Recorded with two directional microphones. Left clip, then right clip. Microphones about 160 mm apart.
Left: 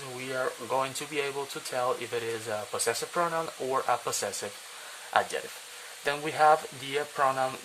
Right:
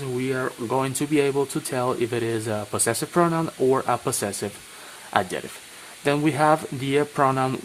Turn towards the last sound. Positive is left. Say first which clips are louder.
# right 6 dB
turn(degrees=-30)  # may be behind; listen again after turning